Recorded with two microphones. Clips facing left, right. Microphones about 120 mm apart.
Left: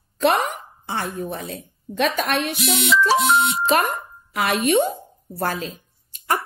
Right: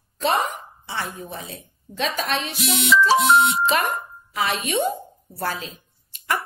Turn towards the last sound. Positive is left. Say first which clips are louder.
# left 2 dB
turn(degrees=40)  # may be behind; listen again after turning